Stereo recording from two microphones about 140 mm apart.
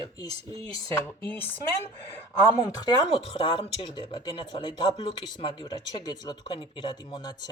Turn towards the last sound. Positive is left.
turn(degrees=30)  # may be behind; listen again after turning